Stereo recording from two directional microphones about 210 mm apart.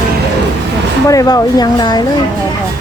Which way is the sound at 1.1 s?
15° left (ahead or behind).